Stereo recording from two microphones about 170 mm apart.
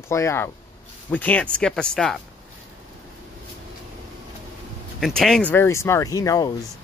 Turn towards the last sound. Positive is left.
turn(degrees=20)  # may be behind; listen again after turning